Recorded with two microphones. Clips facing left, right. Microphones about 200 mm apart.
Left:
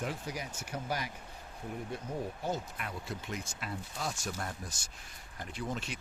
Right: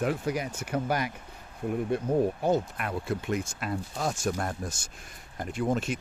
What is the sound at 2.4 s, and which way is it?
Speech, 60° right (ahead or behind).